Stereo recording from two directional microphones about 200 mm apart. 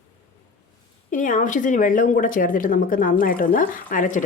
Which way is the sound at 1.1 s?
40° left (ahead or behind).